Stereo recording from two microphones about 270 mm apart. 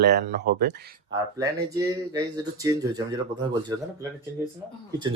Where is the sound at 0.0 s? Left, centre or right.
Right.